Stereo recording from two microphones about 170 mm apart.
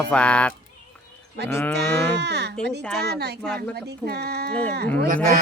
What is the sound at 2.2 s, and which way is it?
Speech, 85° right.